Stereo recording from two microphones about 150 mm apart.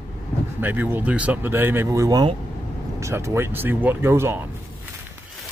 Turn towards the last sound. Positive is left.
turn(degrees=-15)  # may be behind; listen again after turning